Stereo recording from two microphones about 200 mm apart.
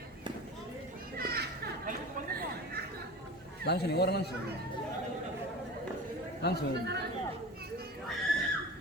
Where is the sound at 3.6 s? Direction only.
55° left (ahead or behind).